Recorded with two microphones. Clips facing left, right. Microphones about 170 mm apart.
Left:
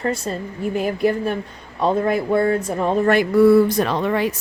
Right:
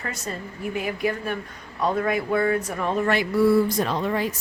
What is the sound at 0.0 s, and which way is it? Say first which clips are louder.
A woman's voice: left 9 dB; 30° left (ahead or behind).